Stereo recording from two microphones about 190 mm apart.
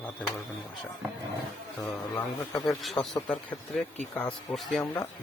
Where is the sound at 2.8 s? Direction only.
Centre (ahead or behind).